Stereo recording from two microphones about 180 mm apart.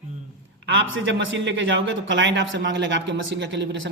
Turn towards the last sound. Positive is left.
turn(degrees=-90)